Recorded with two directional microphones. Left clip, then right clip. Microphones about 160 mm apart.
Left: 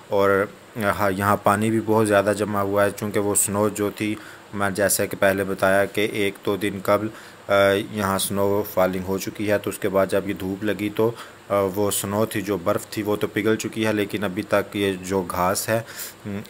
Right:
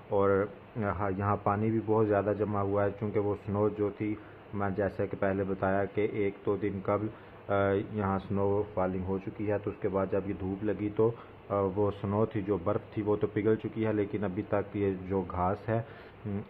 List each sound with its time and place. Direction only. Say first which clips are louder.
0.1 s speech: left 8 dB; 25° left (ahead or behind)
8.5 s speech: left 9 dB; 35° left (ahead or behind); by 15.8 s 20° left (ahead or behind)